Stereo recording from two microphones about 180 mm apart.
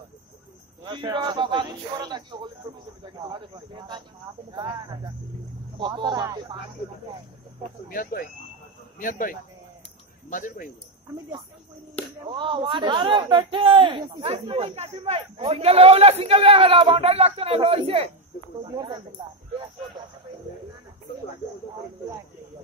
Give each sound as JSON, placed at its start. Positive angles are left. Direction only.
{"t": 0.8, "sound": "a man's voice", "side_deg": -25}
{"t": 7.9, "sound": "speech", "side_deg": 50}
{"t": 12.3, "sound": "a man's voice", "side_deg": -25}